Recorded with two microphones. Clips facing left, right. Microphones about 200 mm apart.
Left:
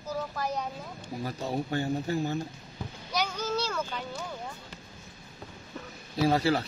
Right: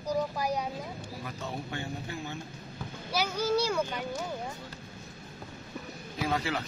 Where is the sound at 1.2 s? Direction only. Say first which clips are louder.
Left 8 dB; 35° left (ahead or behind).